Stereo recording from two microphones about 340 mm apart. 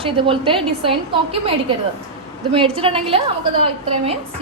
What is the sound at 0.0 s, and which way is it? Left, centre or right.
A woman's voice, centre.